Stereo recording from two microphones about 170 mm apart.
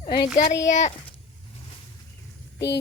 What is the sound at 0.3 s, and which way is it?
Speech, 45° left (ahead or behind).